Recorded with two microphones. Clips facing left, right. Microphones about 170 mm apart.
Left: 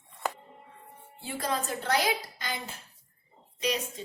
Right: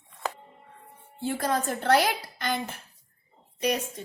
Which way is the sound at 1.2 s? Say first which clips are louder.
Right 5 dB; 50° right (ahead or behind).